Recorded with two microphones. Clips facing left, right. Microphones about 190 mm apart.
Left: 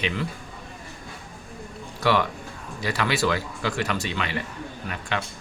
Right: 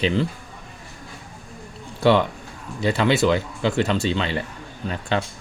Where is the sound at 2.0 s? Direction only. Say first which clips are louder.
Right 5 dB; 25° right (ahead or behind).